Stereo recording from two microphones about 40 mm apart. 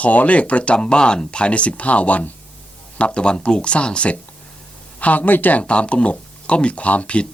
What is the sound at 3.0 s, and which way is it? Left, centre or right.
Speech, left.